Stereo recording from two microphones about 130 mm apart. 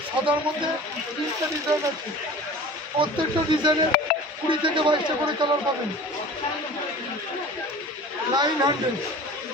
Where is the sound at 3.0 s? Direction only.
35° right (ahead or behind).